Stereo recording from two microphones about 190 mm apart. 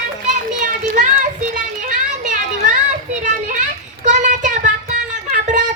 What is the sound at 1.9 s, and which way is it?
Children playing, 40° right (ahead or behind).